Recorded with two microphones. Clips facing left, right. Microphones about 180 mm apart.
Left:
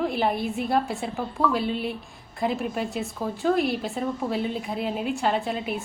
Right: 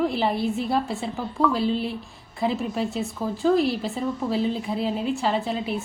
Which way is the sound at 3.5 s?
55° left (ahead or behind).